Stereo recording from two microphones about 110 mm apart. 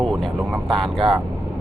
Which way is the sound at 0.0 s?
Centre (ahead or behind).